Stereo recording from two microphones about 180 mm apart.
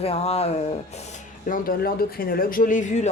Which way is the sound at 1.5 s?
50° left (ahead or behind).